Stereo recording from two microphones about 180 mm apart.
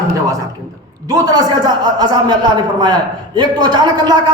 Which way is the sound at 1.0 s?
20° right (ahead or behind).